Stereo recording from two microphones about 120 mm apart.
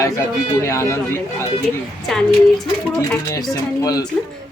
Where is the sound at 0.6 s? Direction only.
25° left (ahead or behind).